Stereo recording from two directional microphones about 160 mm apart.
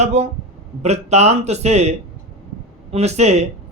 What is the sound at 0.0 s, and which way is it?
A man's voice, 40° right (ahead or behind).